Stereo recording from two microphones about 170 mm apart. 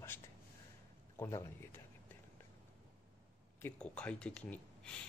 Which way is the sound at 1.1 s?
15° left (ahead or behind).